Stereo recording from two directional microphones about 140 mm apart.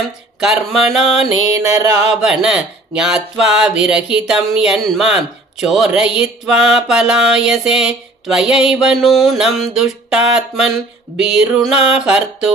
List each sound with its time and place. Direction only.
0.7 s speech: centre (ahead or behind)
1.5 s music: 25° right (ahead or behind)
2.2 s speech: 5° right (ahead or behind)